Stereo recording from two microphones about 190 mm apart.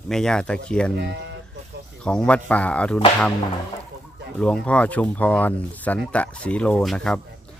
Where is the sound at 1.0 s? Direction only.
60° right (ahead or behind).